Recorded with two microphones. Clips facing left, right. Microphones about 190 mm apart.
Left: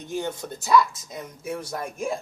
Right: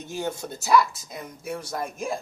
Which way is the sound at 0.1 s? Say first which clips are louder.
Left 1 dB; 10° right (ahead or behind).